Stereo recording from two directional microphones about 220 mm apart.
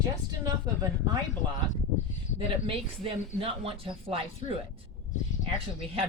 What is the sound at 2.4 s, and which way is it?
Speech, 25° right (ahead or behind).